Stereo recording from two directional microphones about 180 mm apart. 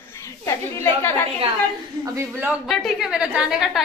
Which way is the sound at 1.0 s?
15° left (ahead or behind).